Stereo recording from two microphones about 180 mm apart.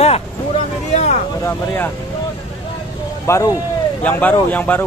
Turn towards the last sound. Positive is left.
turn(degrees=10)  # may be behind; listen again after turning